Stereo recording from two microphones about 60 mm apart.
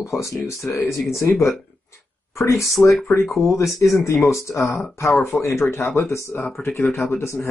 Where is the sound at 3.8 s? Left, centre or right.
Left.